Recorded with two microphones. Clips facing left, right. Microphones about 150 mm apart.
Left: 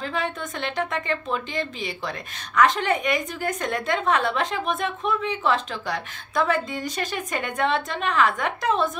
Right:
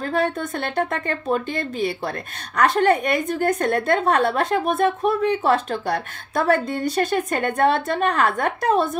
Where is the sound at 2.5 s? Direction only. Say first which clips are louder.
Right 3 dB; 40° right (ahead or behind); by 6.6 s 55° right (ahead or behind).